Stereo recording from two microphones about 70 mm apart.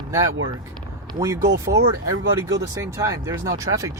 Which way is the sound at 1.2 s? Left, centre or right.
Right.